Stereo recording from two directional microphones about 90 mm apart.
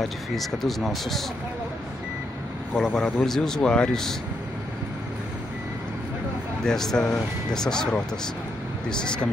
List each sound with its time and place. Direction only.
0.0 s speech: centre (ahead or behind)
2.7 s speech: 5° left (ahead or behind)
6.6 s speech: 5° left (ahead or behind)